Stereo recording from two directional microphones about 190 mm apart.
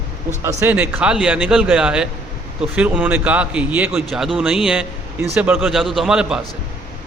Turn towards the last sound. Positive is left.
turn(degrees=-5)  # may be behind; listen again after turning